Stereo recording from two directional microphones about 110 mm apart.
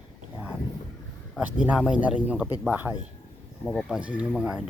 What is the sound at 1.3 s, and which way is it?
A man's voice, 10° right (ahead or behind).